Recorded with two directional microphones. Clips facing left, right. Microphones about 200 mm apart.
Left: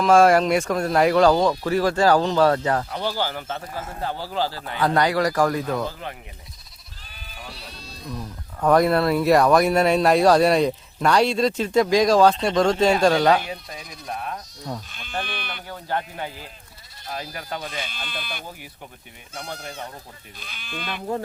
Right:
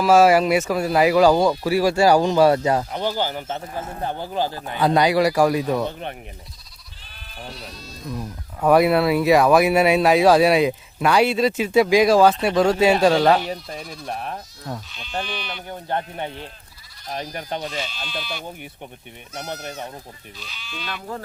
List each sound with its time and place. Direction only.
0.0 s speech: 5° right (ahead or behind); by 6.1 s 20° right (ahead or behind)
8.6 s speech: 5° right (ahead or behind)
14.8 s speech: 50° left (ahead or behind)
15.7 s speech: 20° right (ahead or behind)
17.8 s speech: 55° left (ahead or behind)
20.4 s speech: 55° left (ahead or behind)